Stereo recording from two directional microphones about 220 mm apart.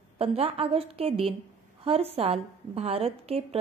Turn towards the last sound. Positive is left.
turn(degrees=-25)  # may be behind; listen again after turning